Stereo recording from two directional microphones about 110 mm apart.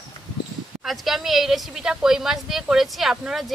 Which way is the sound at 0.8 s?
Centre (ahead or behind).